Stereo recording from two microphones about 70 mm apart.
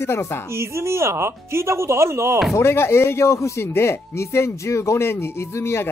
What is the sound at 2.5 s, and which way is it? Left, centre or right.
Speech, left.